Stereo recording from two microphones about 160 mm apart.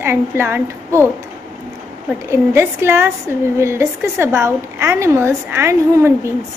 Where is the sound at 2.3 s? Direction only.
15° right (ahead or behind).